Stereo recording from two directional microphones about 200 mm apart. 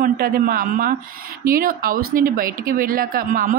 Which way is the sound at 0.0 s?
45° right (ahead or behind).